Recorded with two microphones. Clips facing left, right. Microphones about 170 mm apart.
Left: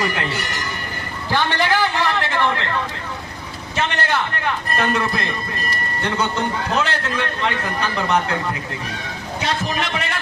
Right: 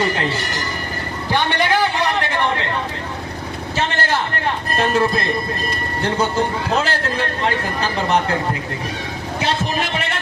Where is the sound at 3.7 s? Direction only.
30° right (ahead or behind).